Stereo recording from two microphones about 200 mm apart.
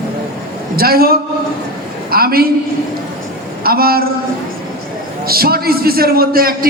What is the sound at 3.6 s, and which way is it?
Speech, 50° right (ahead or behind).